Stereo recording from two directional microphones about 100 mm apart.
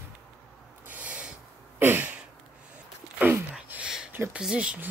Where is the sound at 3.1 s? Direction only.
15° right (ahead or behind).